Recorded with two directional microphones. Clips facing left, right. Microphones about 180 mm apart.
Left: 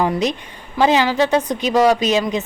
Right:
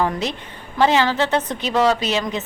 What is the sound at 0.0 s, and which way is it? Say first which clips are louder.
Speech: left 3 dB; 15° left (ahead or behind).